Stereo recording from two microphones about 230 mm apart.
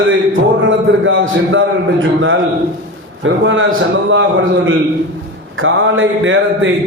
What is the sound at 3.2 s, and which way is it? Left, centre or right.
A man's voice, right.